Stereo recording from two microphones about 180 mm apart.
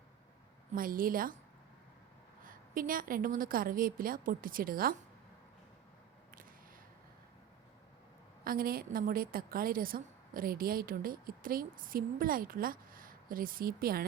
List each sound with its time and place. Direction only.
0.7 s a woman's voice: 50° right (ahead or behind)
2.4 s a woman's voice: 50° right (ahead or behind)
8.4 s a woman's voice: 55° right (ahead or behind)